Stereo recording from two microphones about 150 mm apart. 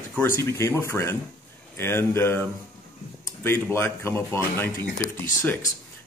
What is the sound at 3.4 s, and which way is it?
A man's voice, 15° left (ahead or behind).